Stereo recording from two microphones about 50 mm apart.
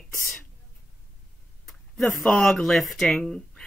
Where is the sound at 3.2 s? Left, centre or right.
Centre.